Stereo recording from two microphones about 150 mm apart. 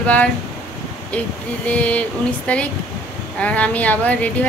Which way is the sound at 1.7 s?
10° left (ahead or behind).